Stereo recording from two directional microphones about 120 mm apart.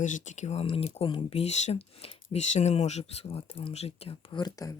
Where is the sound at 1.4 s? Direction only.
65° left (ahead or behind).